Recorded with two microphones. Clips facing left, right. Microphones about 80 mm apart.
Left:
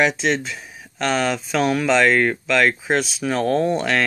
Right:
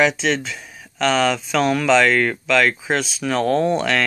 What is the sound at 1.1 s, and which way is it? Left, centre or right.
Speech, centre.